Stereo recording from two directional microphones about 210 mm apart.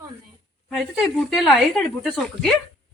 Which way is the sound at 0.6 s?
Centre (ahead or behind).